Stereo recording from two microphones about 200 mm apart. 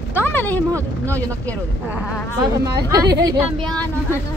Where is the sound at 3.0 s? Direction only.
60° right (ahead or behind).